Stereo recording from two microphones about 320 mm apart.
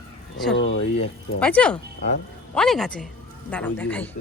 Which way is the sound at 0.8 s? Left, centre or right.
Centre.